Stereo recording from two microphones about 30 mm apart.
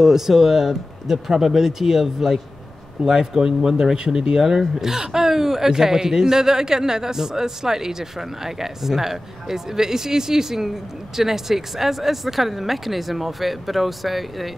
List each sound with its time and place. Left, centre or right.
0.0 s speech: centre
3.0 s speech: right
4.4 s speech: centre